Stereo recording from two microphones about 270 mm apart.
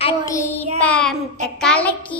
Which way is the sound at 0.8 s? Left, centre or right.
Centre.